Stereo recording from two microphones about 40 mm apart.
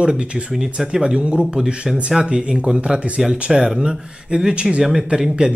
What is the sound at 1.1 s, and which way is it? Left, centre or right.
Speech, right.